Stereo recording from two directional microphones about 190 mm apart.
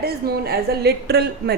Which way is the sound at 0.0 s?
55° right (ahead or behind).